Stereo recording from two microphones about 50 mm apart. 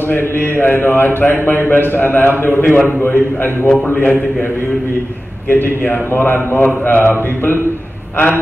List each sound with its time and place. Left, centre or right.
0.0 s speech: left
3.6 s a man's voice: left
3.9 s a man's voice: left
5.5 s speech: left